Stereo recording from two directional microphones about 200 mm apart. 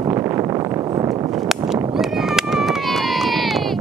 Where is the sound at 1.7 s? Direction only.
Centre (ahead or behind).